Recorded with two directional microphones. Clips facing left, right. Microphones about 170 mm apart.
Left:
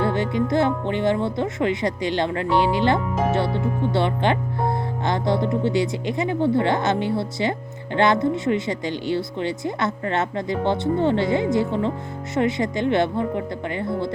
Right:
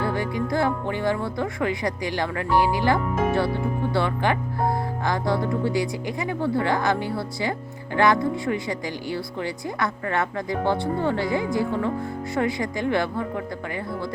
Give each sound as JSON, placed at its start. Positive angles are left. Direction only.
{"t": 0.0, "sound": "speech", "side_deg": 25}